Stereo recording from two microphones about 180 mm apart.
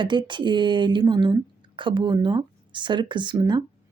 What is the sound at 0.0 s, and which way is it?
Speech, 25° right (ahead or behind).